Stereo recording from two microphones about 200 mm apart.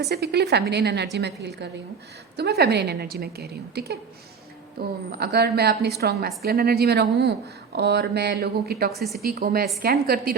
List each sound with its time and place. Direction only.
0.0 s a woman's voice: 55° right (ahead or behind)